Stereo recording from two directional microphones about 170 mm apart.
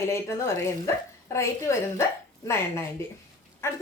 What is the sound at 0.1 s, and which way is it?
A woman's voice, 15° left (ahead or behind).